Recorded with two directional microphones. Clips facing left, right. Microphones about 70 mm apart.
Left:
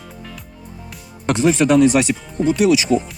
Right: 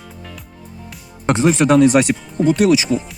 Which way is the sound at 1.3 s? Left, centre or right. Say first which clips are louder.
Right 1 dB; right.